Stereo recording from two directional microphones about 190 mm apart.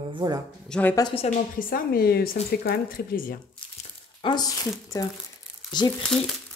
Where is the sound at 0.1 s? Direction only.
20° right (ahead or behind).